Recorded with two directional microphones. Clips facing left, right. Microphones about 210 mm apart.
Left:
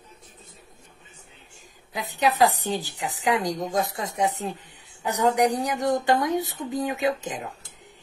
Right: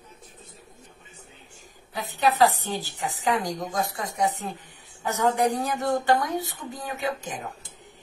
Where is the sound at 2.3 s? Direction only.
20° left (ahead or behind).